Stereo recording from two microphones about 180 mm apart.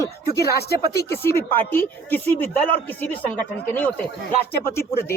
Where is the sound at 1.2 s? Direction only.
15° left (ahead or behind).